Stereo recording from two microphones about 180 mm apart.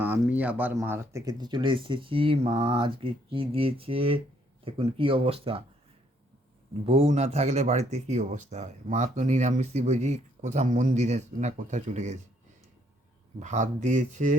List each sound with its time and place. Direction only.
0.0 s speech: 10° right (ahead or behind); by 5.6 s 30° right (ahead or behind)
6.8 s speech: 35° right (ahead or behind)
13.4 s speech: 40° right (ahead or behind)